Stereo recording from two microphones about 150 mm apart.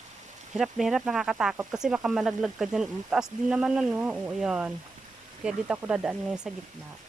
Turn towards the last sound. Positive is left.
turn(degrees=-5)  # may be behind; listen again after turning